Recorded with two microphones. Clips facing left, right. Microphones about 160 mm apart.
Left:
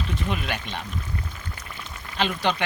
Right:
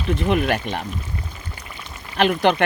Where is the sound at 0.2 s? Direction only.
60° right (ahead or behind).